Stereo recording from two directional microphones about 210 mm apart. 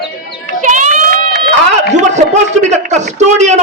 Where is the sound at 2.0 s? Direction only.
35° right (ahead or behind).